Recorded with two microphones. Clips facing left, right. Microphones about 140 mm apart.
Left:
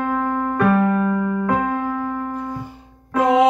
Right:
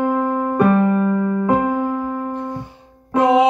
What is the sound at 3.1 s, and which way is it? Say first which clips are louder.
Music: right 2 dB; 5° right (ahead or behind).